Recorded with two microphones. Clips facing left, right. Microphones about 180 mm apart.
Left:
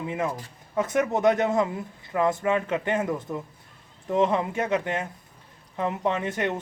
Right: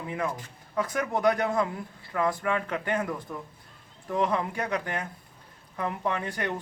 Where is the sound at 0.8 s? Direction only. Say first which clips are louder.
Left 4 dB; 25° left (ahead or behind).